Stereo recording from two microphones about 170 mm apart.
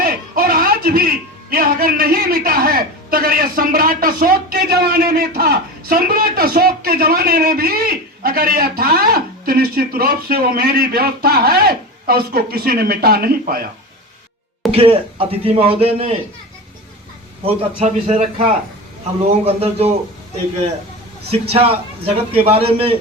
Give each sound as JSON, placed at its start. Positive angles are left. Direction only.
{"t": 0.0, "sound": "speech", "side_deg": -60}
{"t": 14.7, "sound": "a man's voice", "side_deg": -35}
{"t": 17.4, "sound": "a man's voice", "side_deg": -35}
{"t": 19.3, "sound": "a man's voice", "side_deg": -35}
{"t": 21.2, "sound": "a man's voice", "side_deg": -35}